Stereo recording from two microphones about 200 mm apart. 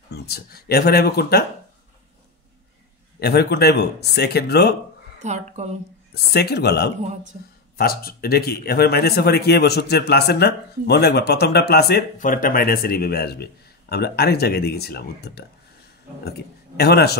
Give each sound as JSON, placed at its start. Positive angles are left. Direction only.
{"t": 0.1, "sound": "speech", "side_deg": 50}
{"t": 3.2, "sound": "speech", "side_deg": 55}
{"t": 5.2, "sound": "a woman's voice", "side_deg": -35}
{"t": 6.3, "sound": "speech", "side_deg": 55}